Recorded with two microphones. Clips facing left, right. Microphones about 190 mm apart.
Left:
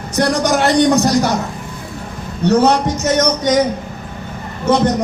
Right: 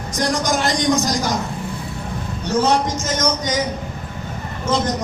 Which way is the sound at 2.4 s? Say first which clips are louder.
Left 6 dB; 65° left (ahead or behind).